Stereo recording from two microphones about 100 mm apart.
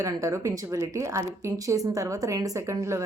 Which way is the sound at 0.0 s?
35° right (ahead or behind).